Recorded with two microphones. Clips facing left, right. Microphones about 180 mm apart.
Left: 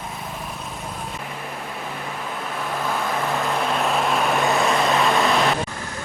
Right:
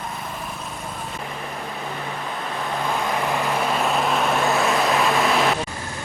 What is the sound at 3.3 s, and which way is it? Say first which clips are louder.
Vehicle: even; 5° right (ahead or behind).